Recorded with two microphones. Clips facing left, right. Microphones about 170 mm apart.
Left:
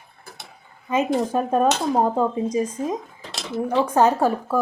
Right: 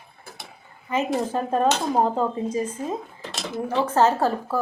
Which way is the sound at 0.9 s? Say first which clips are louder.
Left 3 dB; 20° left (ahead or behind).